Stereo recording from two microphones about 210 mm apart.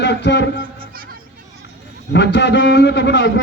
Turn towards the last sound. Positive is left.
turn(degrees=55)  # may be behind; listen again after turning